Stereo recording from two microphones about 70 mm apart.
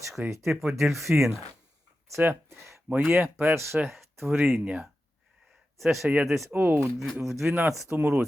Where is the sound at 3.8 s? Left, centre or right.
Centre.